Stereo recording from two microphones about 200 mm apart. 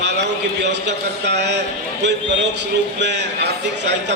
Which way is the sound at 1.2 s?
60° right (ahead or behind).